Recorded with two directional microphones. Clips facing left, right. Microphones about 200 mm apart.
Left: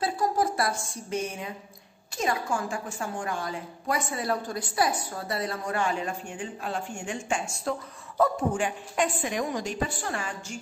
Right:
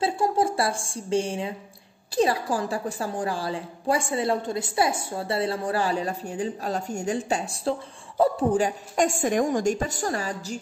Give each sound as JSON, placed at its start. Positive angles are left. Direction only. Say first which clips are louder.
{"t": 0.0, "sound": "a woman's voice", "louder": "right 3 dB", "side_deg": -25}